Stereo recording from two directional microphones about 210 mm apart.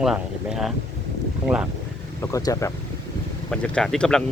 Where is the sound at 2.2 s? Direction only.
15° left (ahead or behind).